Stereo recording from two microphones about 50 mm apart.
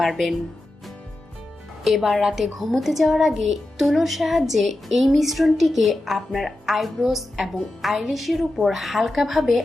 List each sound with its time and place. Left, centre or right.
0.0 s a child's voice: centre
1.8 s a child's voice: centre